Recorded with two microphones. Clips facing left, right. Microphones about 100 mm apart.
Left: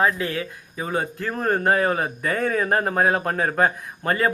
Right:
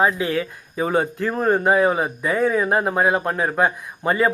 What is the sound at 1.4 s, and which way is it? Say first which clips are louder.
Speech: right 3 dB; 15° right (ahead or behind).